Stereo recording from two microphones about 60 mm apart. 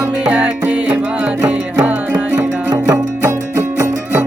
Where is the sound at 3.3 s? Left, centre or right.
Right.